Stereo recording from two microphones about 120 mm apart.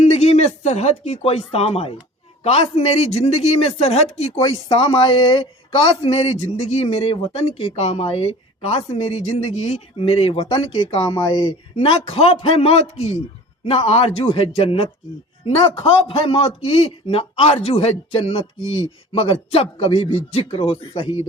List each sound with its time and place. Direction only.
0.1 s a man's voice: 65° left (ahead or behind)
4.7 s a man's voice: 45° left (ahead or behind)
11.2 s speech: 35° left (ahead or behind)
11.8 s a man's voice: 55° left (ahead or behind)